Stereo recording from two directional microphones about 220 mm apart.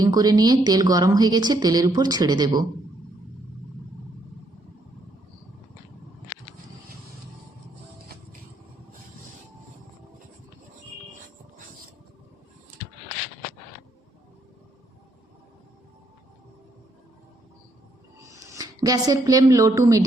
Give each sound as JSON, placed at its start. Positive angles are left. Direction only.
{"t": 0.0, "sound": "speech", "side_deg": -15}
{"t": 18.5, "sound": "speech", "side_deg": -15}